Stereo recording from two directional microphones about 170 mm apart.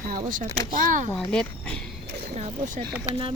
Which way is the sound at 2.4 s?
50° right (ahead or behind).